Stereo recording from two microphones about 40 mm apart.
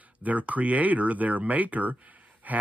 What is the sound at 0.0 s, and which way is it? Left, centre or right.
Speech, right.